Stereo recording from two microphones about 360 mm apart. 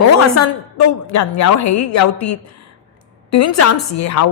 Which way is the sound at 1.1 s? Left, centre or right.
Left.